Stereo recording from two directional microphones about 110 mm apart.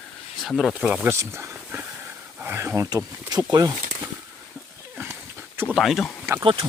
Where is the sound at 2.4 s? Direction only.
20° right (ahead or behind).